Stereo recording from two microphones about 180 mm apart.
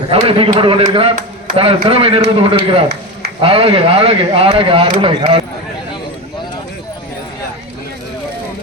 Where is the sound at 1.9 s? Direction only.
30° right (ahead or behind).